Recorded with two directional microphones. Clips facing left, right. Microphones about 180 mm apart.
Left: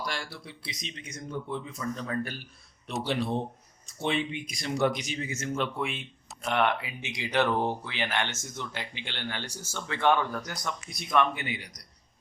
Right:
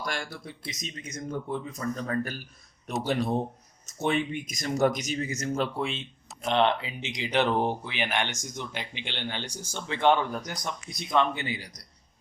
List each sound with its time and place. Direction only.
0.0 s speech: 50° right (ahead or behind); by 11.7 s 30° right (ahead or behind)